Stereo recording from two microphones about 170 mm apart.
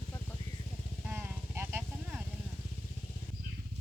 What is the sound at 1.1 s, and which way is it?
Vehicle, 15° right (ahead or behind).